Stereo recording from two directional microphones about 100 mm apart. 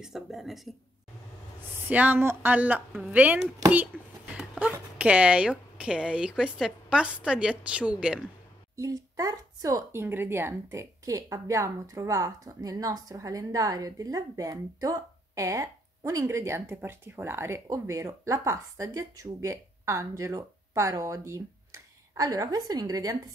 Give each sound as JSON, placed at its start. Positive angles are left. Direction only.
{"t": 0.0, "sound": "speech", "side_deg": -5}
{"t": 1.9, "sound": "a woman's voice", "side_deg": -15}
{"t": 3.9, "sound": "speech", "side_deg": 10}
{"t": 4.9, "sound": "a woman's voice", "side_deg": -15}
{"t": 8.7, "sound": "speech", "side_deg": -35}
{"t": 9.9, "sound": "a woman's voice", "side_deg": -25}